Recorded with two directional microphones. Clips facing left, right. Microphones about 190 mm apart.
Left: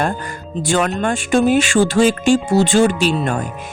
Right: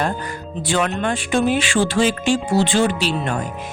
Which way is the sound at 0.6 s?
45° left (ahead or behind).